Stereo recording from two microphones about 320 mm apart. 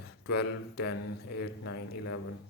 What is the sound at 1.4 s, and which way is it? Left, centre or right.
Speech, left.